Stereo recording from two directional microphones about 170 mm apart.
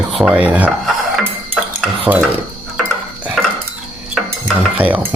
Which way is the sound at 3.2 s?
Centre (ahead or behind).